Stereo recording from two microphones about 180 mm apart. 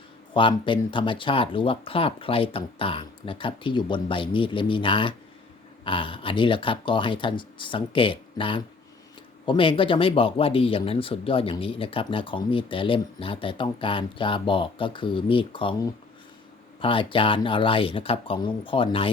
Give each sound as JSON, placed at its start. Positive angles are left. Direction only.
{"t": 0.3, "sound": "speech", "side_deg": 30}
{"t": 16.8, "sound": "speech", "side_deg": 30}